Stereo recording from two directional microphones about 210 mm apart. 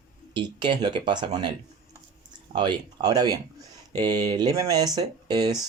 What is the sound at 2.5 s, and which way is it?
Speech, 20° right (ahead or behind).